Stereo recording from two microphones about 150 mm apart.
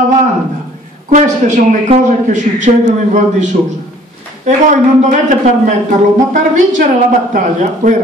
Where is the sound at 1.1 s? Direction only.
55° right (ahead or behind).